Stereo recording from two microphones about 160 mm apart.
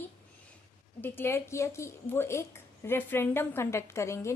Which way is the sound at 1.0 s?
15° left (ahead or behind).